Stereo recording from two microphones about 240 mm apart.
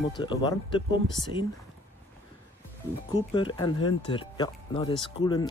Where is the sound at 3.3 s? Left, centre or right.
Centre.